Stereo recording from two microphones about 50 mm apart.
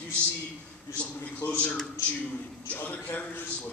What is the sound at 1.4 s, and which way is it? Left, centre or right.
Speech, left.